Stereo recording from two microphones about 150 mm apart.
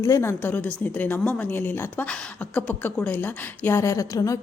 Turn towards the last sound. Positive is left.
turn(degrees=20)  # may be behind; listen again after turning